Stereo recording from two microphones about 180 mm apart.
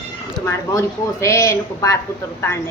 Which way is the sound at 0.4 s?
15° left (ahead or behind).